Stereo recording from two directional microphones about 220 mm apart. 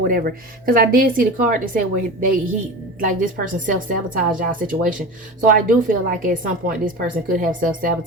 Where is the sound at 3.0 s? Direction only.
35° right (ahead or behind).